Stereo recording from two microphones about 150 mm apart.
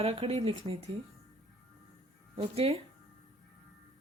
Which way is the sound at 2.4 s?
40° right (ahead or behind).